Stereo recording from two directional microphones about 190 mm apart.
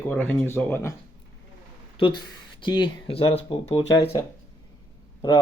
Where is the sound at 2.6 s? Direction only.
25° left (ahead or behind).